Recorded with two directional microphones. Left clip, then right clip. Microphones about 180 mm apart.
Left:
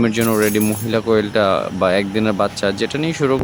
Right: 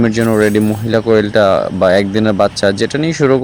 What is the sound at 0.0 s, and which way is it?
Speech, 10° right (ahead or behind).